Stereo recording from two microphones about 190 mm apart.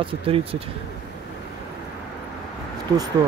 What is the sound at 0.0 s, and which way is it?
Speech, 30° right (ahead or behind).